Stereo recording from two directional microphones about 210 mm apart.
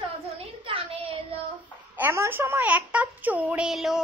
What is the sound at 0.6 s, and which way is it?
Speech, 25° right (ahead or behind).